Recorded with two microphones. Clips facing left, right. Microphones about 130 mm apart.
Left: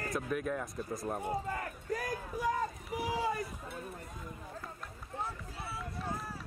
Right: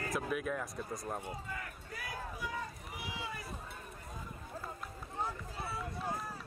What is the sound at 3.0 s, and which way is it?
Run, 40° left (ahead or behind).